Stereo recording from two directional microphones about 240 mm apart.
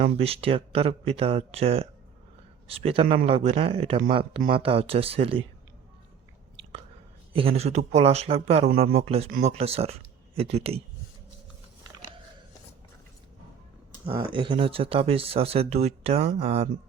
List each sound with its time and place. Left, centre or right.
0.0 s speech: right
7.3 s speech: right
14.3 s speech: right